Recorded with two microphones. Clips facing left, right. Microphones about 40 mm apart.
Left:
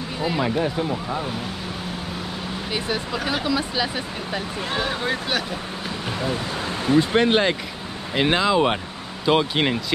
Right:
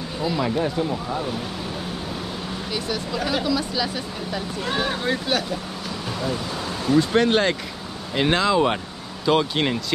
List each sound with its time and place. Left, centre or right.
0.2 s speech: left
0.6 s speech: centre
2.7 s speech: left
4.7 s speech: centre
6.9 s speech: left